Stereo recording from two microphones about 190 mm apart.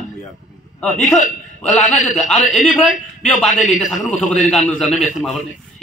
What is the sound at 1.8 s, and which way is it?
Speech, 40° left (ahead or behind).